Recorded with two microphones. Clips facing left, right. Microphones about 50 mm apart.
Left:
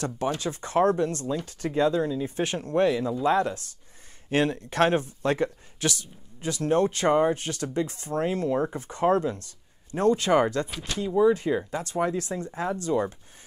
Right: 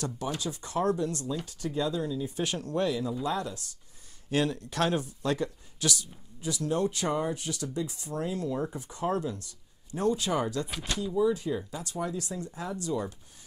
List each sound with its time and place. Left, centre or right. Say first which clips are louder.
0.4 s speech: left 8 dB; left